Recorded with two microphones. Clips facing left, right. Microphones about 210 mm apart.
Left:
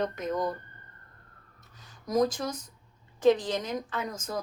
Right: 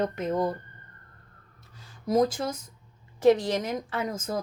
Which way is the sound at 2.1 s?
25° right (ahead or behind).